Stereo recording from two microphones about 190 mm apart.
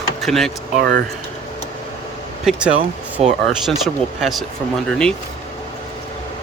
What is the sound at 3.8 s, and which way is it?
Speech, centre (ahead or behind).